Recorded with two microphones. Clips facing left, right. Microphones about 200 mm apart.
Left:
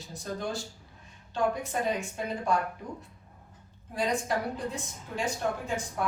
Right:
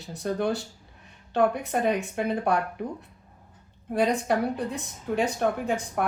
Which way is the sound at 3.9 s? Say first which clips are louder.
Right 6 dB; 65° right (ahead or behind).